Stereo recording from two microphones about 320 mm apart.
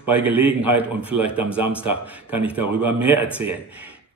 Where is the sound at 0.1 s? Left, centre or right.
Centre.